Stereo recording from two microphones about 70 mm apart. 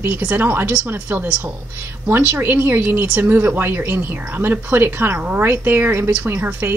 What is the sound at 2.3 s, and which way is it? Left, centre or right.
Speech, right.